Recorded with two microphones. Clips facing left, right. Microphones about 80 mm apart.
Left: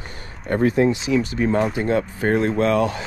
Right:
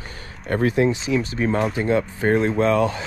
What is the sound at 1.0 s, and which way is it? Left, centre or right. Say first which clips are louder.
Speech: left 2 dB; right.